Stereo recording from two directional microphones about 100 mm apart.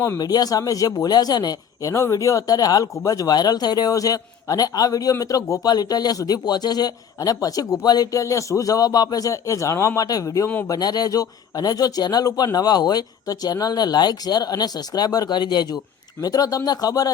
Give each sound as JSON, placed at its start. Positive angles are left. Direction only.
{"t": 0.2, "sound": "speech", "side_deg": 40}